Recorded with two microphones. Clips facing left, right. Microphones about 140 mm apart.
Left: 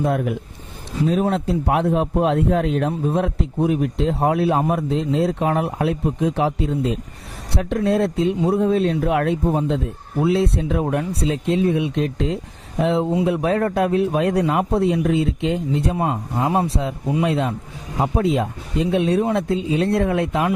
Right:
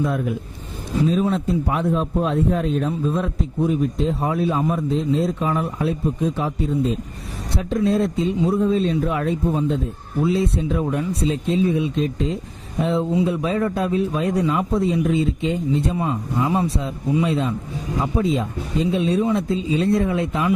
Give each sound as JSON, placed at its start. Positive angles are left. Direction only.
{"t": 0.0, "sound": "a man's voice", "side_deg": 65}
{"t": 7.5, "sound": "a man's voice", "side_deg": 65}
{"t": 10.2, "sound": "a man's voice", "side_deg": 65}
{"t": 18.3, "sound": "speech", "side_deg": 65}